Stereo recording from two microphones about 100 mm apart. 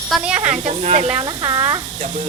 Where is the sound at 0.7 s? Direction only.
90° right.